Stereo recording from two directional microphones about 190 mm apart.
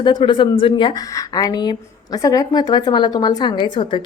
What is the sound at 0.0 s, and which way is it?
A woman's voice, 25° left (ahead or behind).